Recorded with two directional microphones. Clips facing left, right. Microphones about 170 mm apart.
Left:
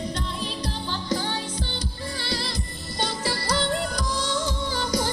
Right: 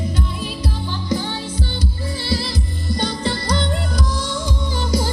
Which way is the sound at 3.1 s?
10° left (ahead or behind).